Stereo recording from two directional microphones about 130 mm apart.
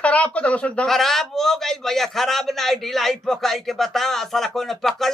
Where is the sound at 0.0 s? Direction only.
10° left (ahead or behind).